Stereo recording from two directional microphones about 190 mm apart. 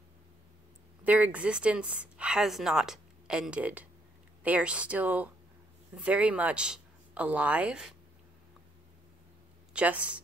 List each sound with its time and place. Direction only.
1.0 s speech: 10° right (ahead or behind)
9.8 s speech: 5° right (ahead or behind)